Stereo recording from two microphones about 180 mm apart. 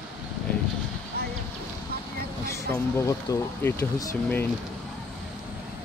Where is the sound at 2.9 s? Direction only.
15° left (ahead or behind).